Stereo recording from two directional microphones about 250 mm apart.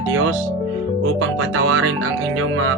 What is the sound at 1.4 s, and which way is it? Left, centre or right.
Speech, right.